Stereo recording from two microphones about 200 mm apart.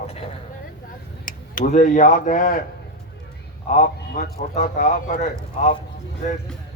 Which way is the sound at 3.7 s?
40° left (ahead or behind).